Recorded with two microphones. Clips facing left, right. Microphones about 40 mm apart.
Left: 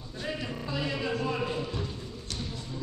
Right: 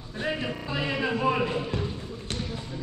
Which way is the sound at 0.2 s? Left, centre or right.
Right.